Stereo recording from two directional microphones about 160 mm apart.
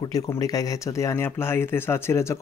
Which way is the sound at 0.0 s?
25° left (ahead or behind).